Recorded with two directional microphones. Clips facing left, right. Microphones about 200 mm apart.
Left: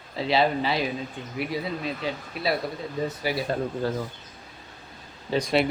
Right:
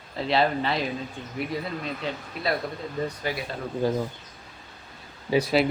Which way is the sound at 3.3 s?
10° left (ahead or behind).